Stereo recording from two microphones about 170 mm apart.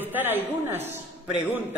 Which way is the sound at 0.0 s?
10° right (ahead or behind).